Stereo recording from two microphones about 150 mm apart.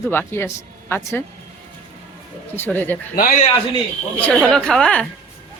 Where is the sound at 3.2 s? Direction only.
70° left (ahead or behind).